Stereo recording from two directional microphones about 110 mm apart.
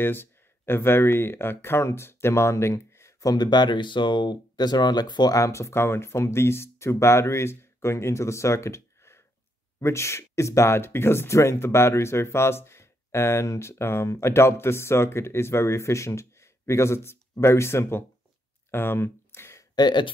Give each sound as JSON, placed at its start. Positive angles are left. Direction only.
{"t": 0.0, "sound": "speech", "side_deg": 20}
{"t": 18.7, "sound": "a sound", "side_deg": 20}
{"t": 19.7, "sound": "speech", "side_deg": 40}